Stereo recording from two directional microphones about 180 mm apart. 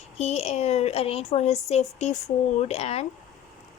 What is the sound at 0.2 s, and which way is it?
A woman's voice, 35° left (ahead or behind).